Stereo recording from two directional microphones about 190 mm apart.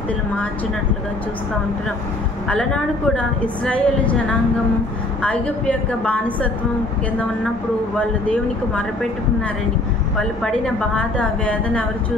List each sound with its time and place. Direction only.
2.4 s a woman's voice: 5° left (ahead or behind)
5.2 s a woman's voice: 5° left (ahead or behind)
11.0 s a woman's voice: 5° left (ahead or behind)